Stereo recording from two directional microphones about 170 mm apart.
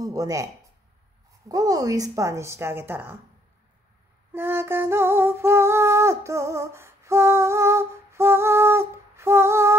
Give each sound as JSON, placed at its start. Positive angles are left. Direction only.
{"t": 0.0, "sound": "speech", "side_deg": -20}
{"t": 1.5, "sound": "female singing", "side_deg": -20}
{"t": 4.3, "sound": "female singing", "side_deg": -15}